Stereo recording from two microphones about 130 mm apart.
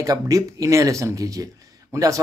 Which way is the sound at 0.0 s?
25° right (ahead or behind).